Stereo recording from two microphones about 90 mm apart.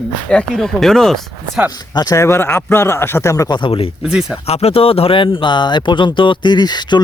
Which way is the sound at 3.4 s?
55° left (ahead or behind).